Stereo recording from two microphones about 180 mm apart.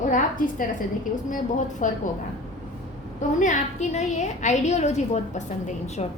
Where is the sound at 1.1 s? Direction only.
45° left (ahead or behind).